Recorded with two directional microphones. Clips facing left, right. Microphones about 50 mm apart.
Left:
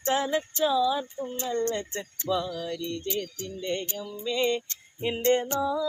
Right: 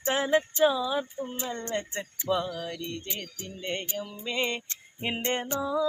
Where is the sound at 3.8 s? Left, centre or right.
Centre.